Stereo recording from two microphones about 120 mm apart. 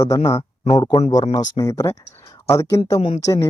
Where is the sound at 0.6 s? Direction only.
50° left (ahead or behind).